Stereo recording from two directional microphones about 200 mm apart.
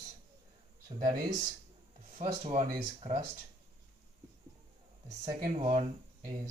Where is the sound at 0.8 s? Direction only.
25° right (ahead or behind).